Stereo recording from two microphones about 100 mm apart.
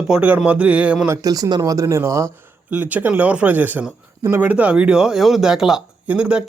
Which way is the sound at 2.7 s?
15° right (ahead or behind).